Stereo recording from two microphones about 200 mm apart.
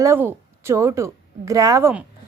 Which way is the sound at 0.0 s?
10° right (ahead or behind).